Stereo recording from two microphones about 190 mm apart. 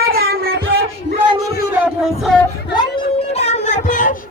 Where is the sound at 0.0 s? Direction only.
55° right (ahead or behind).